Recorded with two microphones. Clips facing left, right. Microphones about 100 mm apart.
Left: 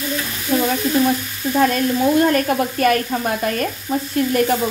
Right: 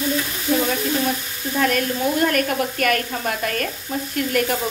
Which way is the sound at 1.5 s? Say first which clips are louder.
Left 4 dB; 30° left (ahead or behind).